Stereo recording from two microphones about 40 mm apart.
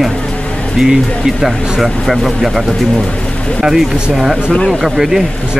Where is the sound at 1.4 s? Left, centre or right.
Centre.